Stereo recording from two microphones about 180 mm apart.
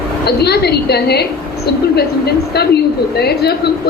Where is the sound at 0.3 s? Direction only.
60° left (ahead or behind).